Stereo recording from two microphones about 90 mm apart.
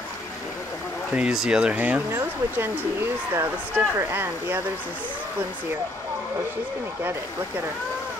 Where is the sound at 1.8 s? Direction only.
20° right (ahead or behind).